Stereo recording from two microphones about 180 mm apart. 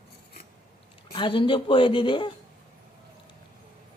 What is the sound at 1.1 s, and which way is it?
Speech, 25° left (ahead or behind).